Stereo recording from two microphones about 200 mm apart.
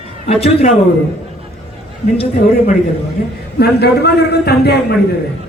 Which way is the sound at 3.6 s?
55° left (ahead or behind).